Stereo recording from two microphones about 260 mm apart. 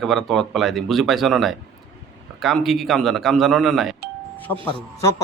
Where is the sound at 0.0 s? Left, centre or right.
Centre.